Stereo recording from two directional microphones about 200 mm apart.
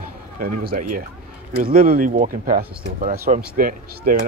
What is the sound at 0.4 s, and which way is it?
Speech, 45° right (ahead or behind).